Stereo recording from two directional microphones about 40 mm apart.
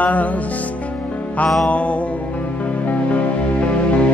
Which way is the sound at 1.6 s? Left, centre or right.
Left.